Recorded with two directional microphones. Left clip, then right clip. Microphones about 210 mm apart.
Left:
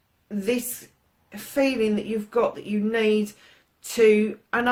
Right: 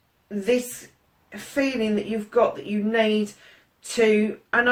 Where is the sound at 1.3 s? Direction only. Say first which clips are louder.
Left 2 dB; 45° left (ahead or behind).